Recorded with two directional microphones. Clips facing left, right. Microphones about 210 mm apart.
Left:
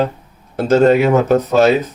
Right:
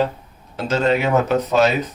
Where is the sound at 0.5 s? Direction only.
50° left (ahead or behind).